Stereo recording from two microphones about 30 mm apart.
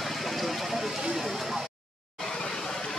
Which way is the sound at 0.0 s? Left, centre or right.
Centre.